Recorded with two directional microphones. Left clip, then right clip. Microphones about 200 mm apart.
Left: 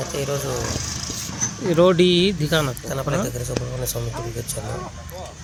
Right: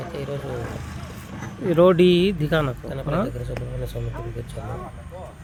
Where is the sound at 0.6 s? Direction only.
60° left (ahead or behind).